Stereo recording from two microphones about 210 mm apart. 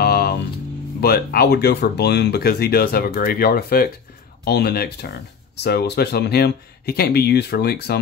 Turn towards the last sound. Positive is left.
turn(degrees=50)  # may be behind; listen again after turning